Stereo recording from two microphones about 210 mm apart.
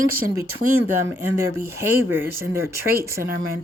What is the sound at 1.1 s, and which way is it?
Speech, 10° right (ahead or behind).